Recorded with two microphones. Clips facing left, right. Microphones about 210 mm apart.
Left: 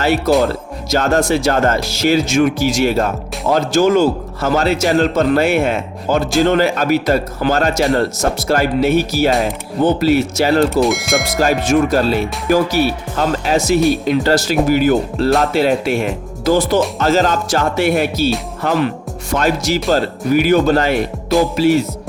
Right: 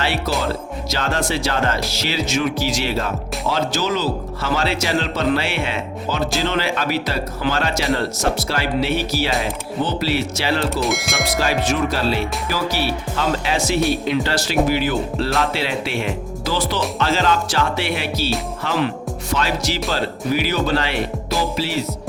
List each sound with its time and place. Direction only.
0.4 s music: 45° left (ahead or behind)
1.3 s speech: 45° left (ahead or behind)
10.8 s speech: centre (ahead or behind)
11.3 s speech: 45° left (ahead or behind)
21.2 s music: centre (ahead or behind)
21.5 s speech: 50° left (ahead or behind)